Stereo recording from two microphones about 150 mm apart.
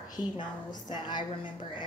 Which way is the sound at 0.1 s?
30° left (ahead or behind).